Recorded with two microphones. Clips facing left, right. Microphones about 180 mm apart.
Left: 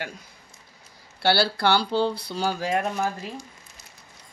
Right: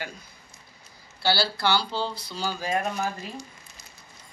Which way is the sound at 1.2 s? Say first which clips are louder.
Left 4 dB; 65° left (ahead or behind).